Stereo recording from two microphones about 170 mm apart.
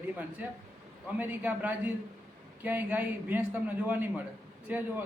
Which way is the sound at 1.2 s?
10° right (ahead or behind).